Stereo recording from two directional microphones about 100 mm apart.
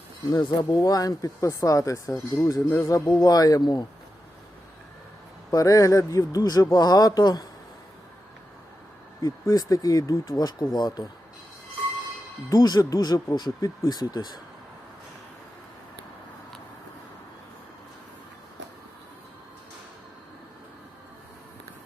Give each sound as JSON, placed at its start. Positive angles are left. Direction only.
{"t": 0.3, "sound": "a man's voice", "side_deg": 40}
{"t": 3.1, "sound": "speech", "side_deg": 40}
{"t": 5.5, "sound": "a man's voice", "side_deg": 35}
{"t": 9.2, "sound": "a man's voice", "side_deg": 35}
{"t": 12.5, "sound": "a man's voice", "side_deg": 40}